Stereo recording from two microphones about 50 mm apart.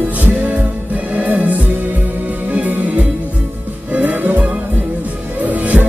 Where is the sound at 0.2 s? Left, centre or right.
Right.